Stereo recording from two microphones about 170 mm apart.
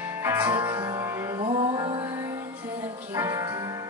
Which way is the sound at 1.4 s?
30° right (ahead or behind).